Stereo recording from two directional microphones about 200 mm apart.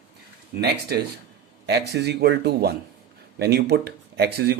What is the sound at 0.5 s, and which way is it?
Speech, 50° right (ahead or behind).